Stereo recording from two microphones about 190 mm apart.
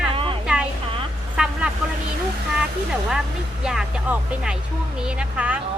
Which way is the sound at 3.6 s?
5° right (ahead or behind).